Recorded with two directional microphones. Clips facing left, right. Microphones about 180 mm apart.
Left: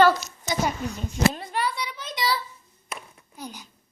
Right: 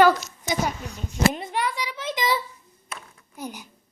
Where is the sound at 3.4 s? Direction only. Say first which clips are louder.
Right 3 dB; 15° right (ahead or behind).